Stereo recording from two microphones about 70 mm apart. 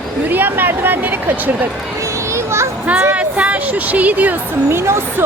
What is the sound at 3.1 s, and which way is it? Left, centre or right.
Speech, centre.